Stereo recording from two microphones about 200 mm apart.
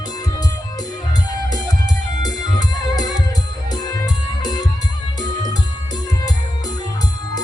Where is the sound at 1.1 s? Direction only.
20° left (ahead or behind).